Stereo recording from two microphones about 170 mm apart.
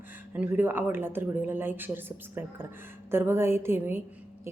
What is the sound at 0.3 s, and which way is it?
A woman's voice, 10° right (ahead or behind).